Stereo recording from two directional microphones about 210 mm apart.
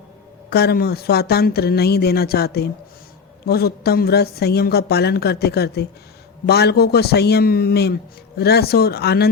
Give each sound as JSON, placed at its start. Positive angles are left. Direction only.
{"t": 0.5, "sound": "a woman's voice", "side_deg": 50}